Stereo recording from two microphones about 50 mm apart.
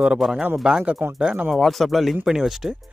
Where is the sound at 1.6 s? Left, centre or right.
Centre.